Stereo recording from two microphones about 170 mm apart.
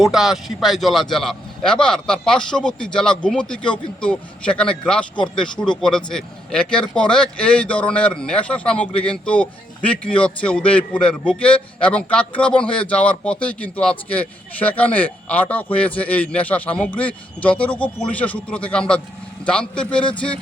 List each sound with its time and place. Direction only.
0.0 s a man's voice: centre (ahead or behind)